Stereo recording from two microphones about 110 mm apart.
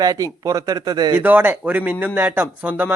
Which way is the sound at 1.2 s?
15° right (ahead or behind).